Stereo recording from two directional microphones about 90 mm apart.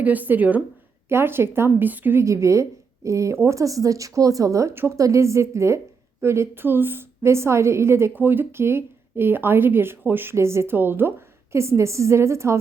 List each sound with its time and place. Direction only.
0.0 s a woman's voice: 20° right (ahead or behind)
2.2 s a woman's voice: 35° right (ahead or behind)